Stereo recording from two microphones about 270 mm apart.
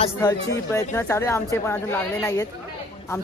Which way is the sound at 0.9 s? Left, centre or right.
Centre.